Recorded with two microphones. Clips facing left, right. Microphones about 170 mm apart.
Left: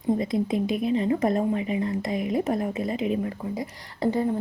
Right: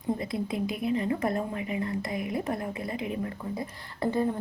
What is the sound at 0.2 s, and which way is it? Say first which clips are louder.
A woman's voice: left 6 dB; 20° left (ahead or behind).